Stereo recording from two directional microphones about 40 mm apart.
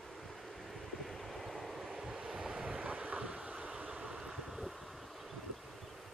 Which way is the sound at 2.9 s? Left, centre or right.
Right.